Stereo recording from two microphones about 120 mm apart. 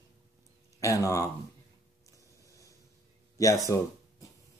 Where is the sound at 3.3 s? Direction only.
25° left (ahead or behind).